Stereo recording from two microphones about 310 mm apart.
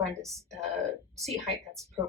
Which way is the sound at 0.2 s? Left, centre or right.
Centre.